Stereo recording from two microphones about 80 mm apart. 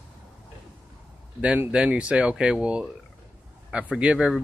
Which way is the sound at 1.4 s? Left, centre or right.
Centre.